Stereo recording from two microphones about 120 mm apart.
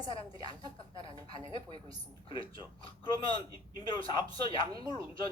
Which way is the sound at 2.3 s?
45° left (ahead or behind).